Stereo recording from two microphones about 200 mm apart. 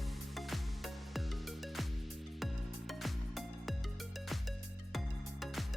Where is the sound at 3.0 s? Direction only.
Centre (ahead or behind).